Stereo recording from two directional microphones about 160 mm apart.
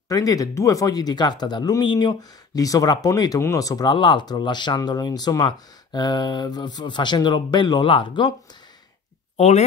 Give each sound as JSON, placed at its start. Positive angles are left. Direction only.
{"t": 0.1, "sound": "speech", "side_deg": 20}